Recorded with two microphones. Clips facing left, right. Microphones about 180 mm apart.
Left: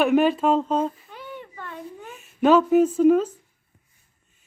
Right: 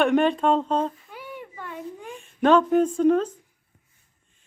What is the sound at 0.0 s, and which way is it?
Speech, 5° left (ahead or behind).